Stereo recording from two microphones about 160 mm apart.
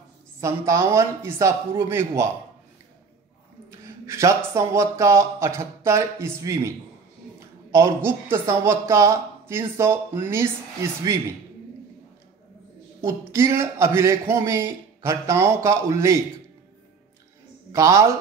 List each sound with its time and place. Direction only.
0.4 s a woman's voice: 20° right (ahead or behind)
3.8 s a woman's voice: 20° right (ahead or behind)
13.0 s a woman's voice: 15° right (ahead or behind)
17.7 s speech: 20° right (ahead or behind)